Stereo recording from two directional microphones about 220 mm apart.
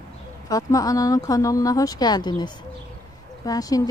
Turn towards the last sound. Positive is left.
turn(degrees=15)  # may be behind; listen again after turning